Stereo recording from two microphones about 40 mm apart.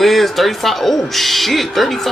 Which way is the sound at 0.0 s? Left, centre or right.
Centre.